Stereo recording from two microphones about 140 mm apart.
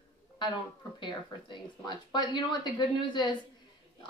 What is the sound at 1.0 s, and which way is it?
A woman's voice, 30° left (ahead or behind).